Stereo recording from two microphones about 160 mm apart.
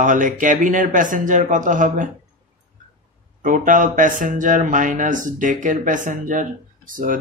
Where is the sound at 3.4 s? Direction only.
55° right (ahead or behind).